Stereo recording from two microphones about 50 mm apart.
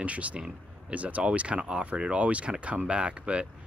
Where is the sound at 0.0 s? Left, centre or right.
Right.